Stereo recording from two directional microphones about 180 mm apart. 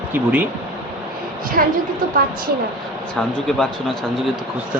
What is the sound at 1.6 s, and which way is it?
Speech, 50° right (ahead or behind).